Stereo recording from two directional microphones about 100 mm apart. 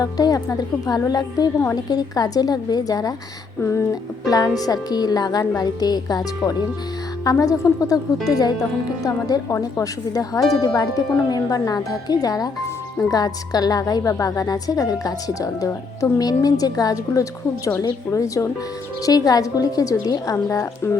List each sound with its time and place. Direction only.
0.0 s a woman's voice: 40° left (ahead or behind)
3.6 s a sound: 30° left (ahead or behind)
4.3 s a woman's voice: 40° left (ahead or behind)